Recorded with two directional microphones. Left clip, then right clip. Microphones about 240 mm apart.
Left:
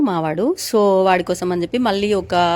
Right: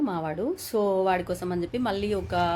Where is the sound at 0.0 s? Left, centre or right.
Left.